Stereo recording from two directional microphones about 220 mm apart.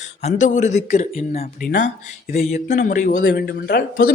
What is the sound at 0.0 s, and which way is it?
A man's voice, 30° left (ahead or behind).